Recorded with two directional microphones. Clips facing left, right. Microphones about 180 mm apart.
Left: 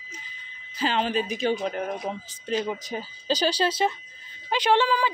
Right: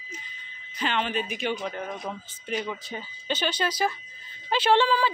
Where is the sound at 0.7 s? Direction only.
35° left (ahead or behind).